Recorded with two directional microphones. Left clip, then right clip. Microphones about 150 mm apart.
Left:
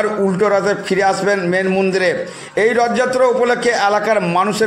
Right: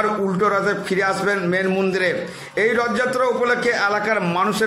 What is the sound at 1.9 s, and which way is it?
A man's voice, 20° left (ahead or behind).